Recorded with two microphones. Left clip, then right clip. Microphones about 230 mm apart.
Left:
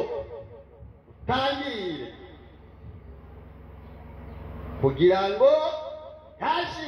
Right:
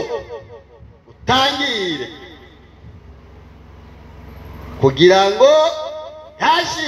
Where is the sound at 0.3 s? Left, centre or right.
Right.